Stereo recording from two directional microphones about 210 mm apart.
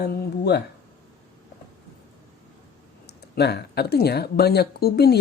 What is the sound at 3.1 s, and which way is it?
Speech, 50° left (ahead or behind).